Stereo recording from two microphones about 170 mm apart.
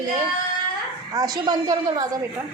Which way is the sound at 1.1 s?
20° right (ahead or behind).